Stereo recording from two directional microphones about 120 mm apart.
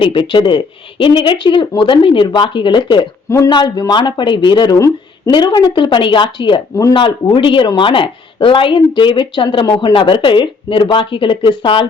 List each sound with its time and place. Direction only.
0.0 s speech: 45° left (ahead or behind)
3.2 s a man's voice: 25° left (ahead or behind)
3.5 s speech: 35° left (ahead or behind)
5.3 s speech: 40° left (ahead or behind)